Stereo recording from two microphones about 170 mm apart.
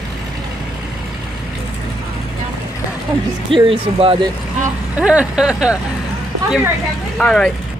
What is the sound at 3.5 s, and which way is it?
Speech, 30° right (ahead or behind).